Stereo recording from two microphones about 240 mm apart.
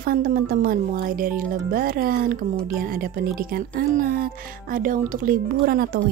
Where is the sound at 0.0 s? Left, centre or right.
Right.